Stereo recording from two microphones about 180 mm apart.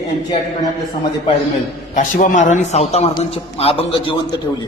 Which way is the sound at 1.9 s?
45° left (ahead or behind).